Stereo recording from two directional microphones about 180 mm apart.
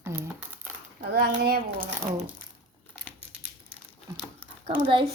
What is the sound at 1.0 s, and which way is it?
Speech, 65° right (ahead or behind).